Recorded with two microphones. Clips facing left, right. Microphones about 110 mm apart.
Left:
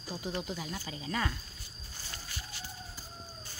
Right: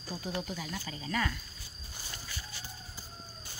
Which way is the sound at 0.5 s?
25° left (ahead or behind).